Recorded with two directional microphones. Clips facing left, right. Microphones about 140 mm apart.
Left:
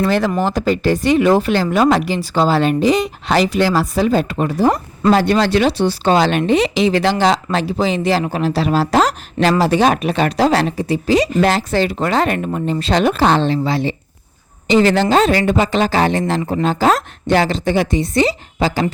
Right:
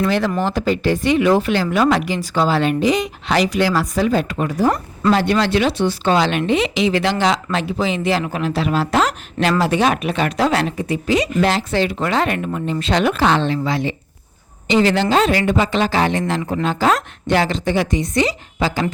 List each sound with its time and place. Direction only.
0.0 s speech: 40° left (ahead or behind)